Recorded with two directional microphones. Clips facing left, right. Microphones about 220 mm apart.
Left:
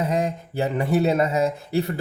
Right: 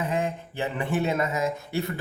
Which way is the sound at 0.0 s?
40° left (ahead or behind).